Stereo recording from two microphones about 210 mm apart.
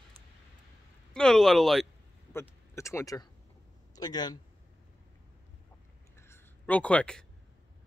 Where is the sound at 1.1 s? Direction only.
5° left (ahead or behind).